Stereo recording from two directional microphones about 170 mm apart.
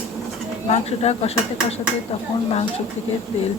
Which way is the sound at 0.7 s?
40° left (ahead or behind).